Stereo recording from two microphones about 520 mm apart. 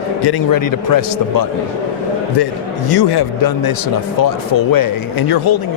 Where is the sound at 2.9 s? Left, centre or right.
Left.